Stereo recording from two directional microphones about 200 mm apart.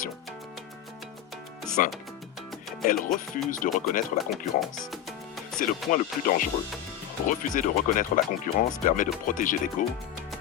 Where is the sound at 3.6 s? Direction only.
40° left (ahead or behind).